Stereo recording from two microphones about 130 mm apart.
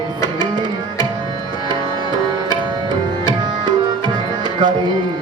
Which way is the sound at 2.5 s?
35° right (ahead or behind).